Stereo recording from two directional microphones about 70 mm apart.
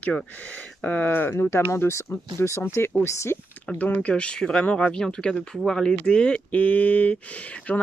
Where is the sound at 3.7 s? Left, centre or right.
Left.